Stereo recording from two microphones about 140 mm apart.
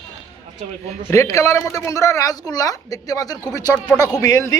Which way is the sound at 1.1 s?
20° left (ahead or behind).